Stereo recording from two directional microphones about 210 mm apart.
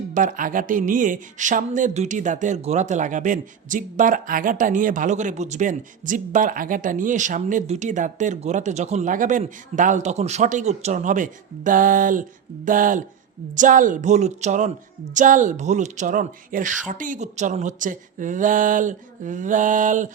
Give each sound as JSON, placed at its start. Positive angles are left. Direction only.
{"t": 0.1, "sound": "speech", "side_deg": -40}